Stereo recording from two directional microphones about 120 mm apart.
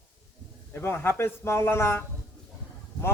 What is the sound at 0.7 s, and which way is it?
A man's voice, 20° left (ahead or behind).